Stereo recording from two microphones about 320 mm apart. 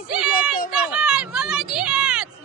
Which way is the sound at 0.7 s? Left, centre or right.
Centre.